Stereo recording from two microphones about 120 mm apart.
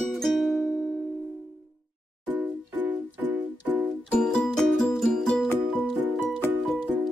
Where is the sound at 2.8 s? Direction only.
15° right (ahead or behind).